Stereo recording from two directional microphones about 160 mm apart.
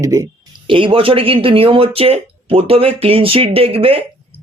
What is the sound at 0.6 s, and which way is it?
Speech, 30° right (ahead or behind).